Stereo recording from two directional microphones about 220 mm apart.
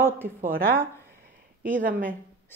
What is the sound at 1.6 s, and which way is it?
Speech, 40° right (ahead or behind).